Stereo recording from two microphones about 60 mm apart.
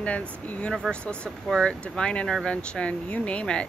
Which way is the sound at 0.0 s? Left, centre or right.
Left.